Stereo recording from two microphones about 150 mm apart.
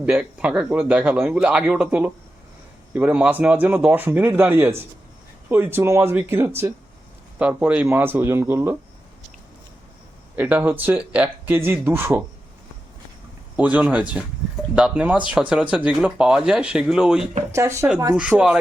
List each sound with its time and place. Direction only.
0.0 s speech: 5° right (ahead or behind)
10.3 s speech: 10° right (ahead or behind)
13.6 s speech: 10° right (ahead or behind)
17.5 s speech: 20° right (ahead or behind)
18.2 s speech: 5° right (ahead or behind)